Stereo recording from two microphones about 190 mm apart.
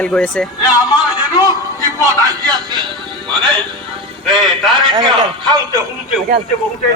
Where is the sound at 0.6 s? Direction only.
20° left (ahead or behind).